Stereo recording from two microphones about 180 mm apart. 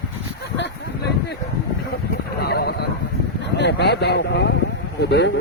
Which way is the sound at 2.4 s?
60° left (ahead or behind).